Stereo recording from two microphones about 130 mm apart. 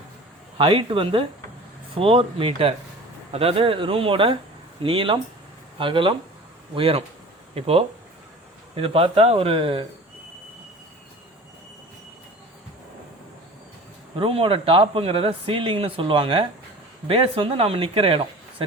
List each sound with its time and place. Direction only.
0.6 s speech: 45° right (ahead or behind)
14.2 s speech: 45° right (ahead or behind)